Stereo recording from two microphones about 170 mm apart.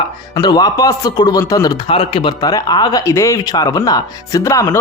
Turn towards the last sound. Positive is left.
turn(degrees=20)  # may be behind; listen again after turning